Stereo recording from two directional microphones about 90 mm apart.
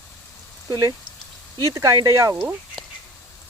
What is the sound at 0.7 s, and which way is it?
Speech, 45° right (ahead or behind).